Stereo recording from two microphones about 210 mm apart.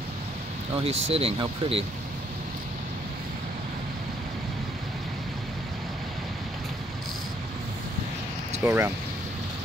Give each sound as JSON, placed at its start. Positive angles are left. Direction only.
{"t": 0.8, "sound": "speech", "side_deg": -30}
{"t": 8.6, "sound": "speech", "side_deg": -10}